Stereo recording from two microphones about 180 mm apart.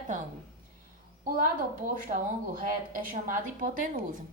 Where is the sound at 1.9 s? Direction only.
50° right (ahead or behind).